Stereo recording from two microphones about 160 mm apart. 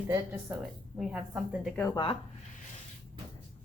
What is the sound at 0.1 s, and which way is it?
A woman's voice, 15° right (ahead or behind).